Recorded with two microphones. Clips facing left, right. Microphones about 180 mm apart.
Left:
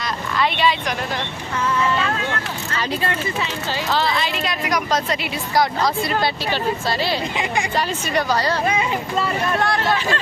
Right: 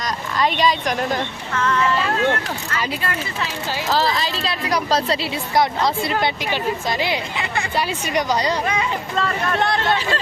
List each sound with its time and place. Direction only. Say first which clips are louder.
0.3 s speech: right 1 dB; 40° right (ahead or behind)
1.5 s speech: right 1 dB; 10° left (ahead or behind)
3.8 s a woman's voice: right 1 dB; 40° right (ahead or behind); by 7.2 s 15° right (ahead or behind)
7.3 s speech: left 3 dB; 15° left (ahead or behind)
7.8 s speech: right 2 dB; 10° right (ahead or behind)
9.6 s a woman's voice: right 2 dB; 20° right (ahead or behind)